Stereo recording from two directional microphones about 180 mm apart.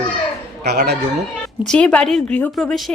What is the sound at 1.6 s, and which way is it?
Speech, 5° left (ahead or behind).